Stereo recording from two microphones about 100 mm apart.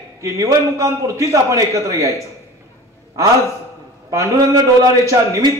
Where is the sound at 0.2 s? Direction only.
30° right (ahead or behind).